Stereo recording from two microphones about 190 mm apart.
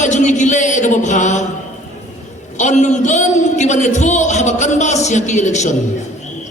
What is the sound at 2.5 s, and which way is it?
A man's voice, 40° left (ahead or behind).